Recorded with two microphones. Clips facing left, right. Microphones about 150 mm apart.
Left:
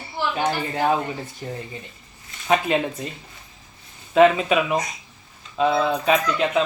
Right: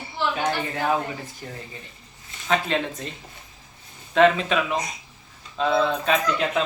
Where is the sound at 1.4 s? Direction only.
25° left (ahead or behind).